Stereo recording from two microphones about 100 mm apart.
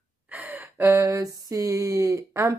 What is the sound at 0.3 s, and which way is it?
Gasp, 20° right (ahead or behind).